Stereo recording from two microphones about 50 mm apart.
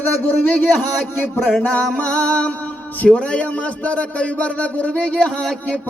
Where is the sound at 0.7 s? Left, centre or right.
Centre.